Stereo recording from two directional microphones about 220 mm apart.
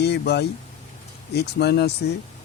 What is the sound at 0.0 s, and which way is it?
Speech, 50° left (ahead or behind).